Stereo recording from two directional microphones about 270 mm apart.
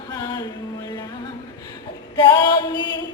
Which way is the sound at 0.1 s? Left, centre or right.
Centre.